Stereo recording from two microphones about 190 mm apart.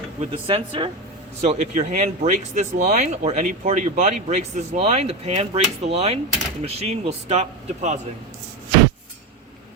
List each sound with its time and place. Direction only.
0.2 s speech: 30° right (ahead or behind)